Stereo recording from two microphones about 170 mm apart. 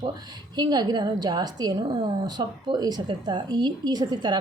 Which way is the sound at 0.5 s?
25° right (ahead or behind).